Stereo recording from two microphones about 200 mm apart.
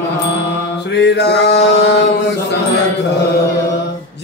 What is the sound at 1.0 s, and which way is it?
Mantra, 60° left (ahead or behind).